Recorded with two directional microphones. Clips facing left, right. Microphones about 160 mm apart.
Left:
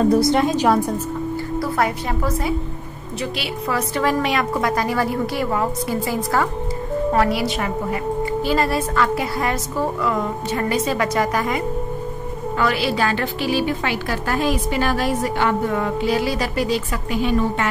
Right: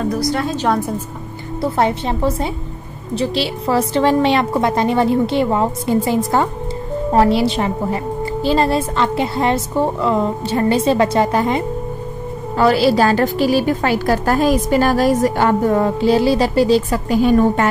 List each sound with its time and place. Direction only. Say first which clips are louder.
0.1 s a woman's voice: left 3 dB; 25° left (ahead or behind)
0.7 s a woman's voice: even; centre (ahead or behind)
1.6 s a woman's voice: right 6 dB; 25° right (ahead or behind); by 17.6 s 40° right (ahead or behind)